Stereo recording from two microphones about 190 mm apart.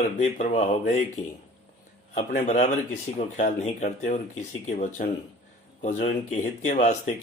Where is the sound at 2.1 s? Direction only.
40° left (ahead or behind).